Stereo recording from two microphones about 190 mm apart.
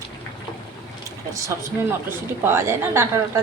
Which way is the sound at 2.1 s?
10° right (ahead or behind).